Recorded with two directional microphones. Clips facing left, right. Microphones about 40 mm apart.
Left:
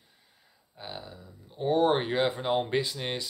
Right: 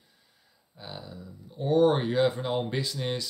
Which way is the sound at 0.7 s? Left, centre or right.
Left.